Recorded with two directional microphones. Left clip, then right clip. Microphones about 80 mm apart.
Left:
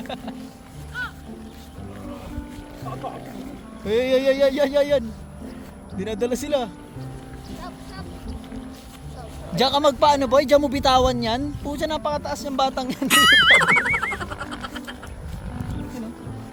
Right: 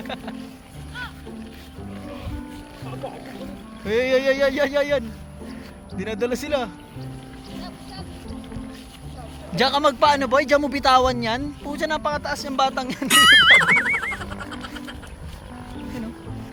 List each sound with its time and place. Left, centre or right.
3.8 s a man's voice: centre; by 6.7 s left
9.6 s a man's voice: left
13.1 s a sound: centre